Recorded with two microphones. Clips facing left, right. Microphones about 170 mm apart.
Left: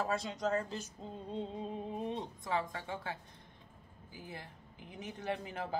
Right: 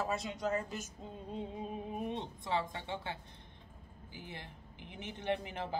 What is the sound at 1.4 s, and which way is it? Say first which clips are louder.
Music: left 1 dB; 15° right (ahead or behind).